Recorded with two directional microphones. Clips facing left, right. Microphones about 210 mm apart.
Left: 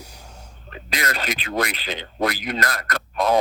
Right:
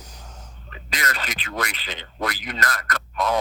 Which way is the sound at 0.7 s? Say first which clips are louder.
Left 3 dB; 35° left (ahead or behind).